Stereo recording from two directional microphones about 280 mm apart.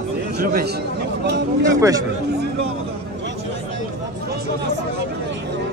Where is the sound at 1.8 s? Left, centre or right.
Centre.